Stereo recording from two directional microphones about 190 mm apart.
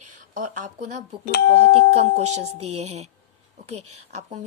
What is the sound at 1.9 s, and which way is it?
Speech, 35° right (ahead or behind).